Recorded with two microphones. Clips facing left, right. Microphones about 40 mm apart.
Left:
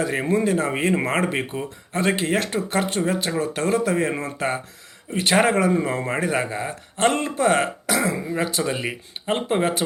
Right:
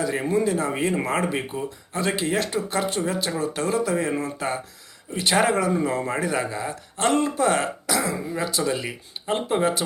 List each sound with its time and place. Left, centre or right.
0.0 s speech: left